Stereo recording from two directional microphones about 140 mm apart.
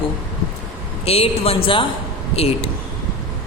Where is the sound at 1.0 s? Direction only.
45° left (ahead or behind).